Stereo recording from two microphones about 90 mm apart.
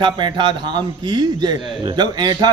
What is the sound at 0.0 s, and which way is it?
A man's voice, 60° right (ahead or behind).